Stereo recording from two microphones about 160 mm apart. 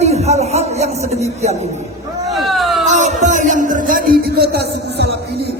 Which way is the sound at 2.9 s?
50° right (ahead or behind).